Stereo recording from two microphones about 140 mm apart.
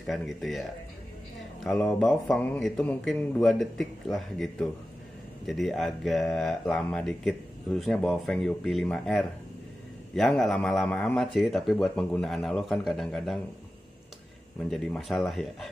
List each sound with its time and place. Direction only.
0.0 s speech: centre (ahead or behind)
14.6 s speech: 5° left (ahead or behind)